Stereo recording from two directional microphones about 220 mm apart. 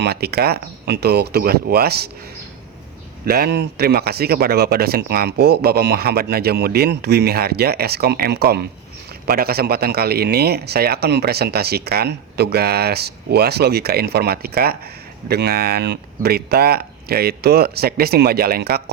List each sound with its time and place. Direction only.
0.0 s a man's voice: 45° right (ahead or behind)
3.2 s a man's voice: 45° right (ahead or behind)